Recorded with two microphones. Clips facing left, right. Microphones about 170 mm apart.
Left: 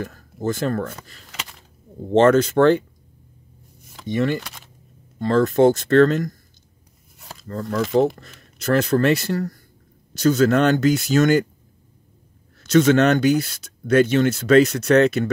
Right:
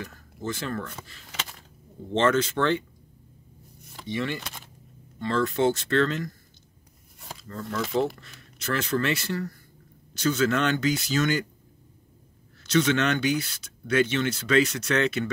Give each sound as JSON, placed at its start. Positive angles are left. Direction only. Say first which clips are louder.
{"t": 0.0, "sound": "speech", "louder": "left 8 dB", "side_deg": 45}
{"t": 2.1, "sound": "speech", "louder": "left 9 dB", "side_deg": 45}
{"t": 4.1, "sound": "speech", "louder": "left 8 dB", "side_deg": 45}
{"t": 7.3, "sound": "speech", "louder": "left 7 dB", "side_deg": 45}
{"t": 12.6, "sound": "speech", "louder": "left 8 dB", "side_deg": 45}